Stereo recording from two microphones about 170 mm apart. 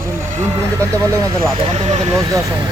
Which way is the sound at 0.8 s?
15° right (ahead or behind).